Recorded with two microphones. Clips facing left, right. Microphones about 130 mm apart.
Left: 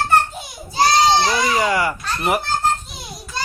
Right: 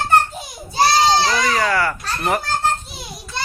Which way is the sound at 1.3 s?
15° left (ahead or behind).